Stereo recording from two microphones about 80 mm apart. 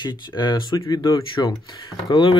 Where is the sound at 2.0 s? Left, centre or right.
Left.